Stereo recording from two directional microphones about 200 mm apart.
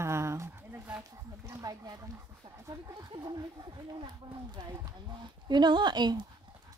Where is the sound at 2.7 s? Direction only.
20° right (ahead or behind).